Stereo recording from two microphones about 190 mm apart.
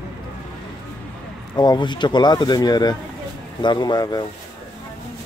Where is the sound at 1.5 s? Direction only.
20° left (ahead or behind).